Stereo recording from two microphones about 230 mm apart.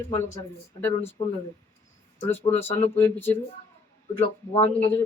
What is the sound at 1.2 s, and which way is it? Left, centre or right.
Speech, centre.